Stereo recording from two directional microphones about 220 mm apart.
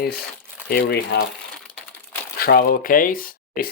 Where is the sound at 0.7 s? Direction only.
45° left (ahead or behind).